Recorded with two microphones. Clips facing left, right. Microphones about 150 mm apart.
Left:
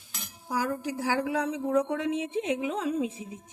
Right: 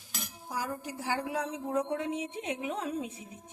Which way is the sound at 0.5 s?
80° left.